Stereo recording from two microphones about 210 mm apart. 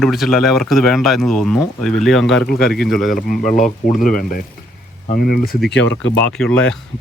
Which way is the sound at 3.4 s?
35° left (ahead or behind).